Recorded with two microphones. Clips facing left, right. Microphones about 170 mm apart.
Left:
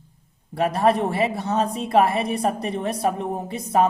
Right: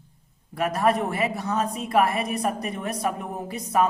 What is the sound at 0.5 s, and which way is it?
A woman's voice, 30° left (ahead or behind).